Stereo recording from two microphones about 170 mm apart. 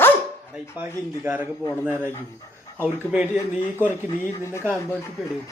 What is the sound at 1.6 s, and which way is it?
Speech, 10° left (ahead or behind).